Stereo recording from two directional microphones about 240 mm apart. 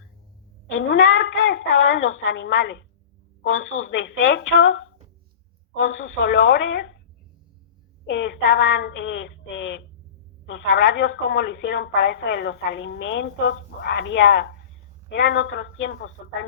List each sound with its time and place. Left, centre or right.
0.7 s a woman's voice: left
8.0 s a woman's voice: left